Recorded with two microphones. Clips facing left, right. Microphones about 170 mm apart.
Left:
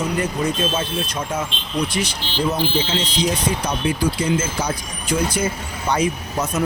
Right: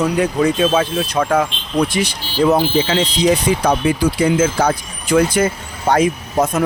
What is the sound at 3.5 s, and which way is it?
Speech, 90° right.